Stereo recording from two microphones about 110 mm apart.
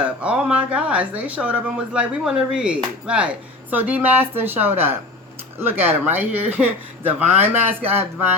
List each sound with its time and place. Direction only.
0.0 s speech: 10° right (ahead or behind)